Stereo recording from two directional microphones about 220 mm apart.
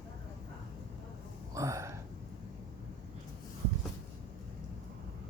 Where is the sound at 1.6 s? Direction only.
15° right (ahead or behind).